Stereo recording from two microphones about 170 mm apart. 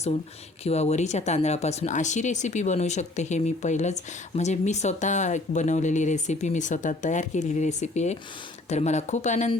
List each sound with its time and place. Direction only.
0.6 s speech: 40° left (ahead or behind)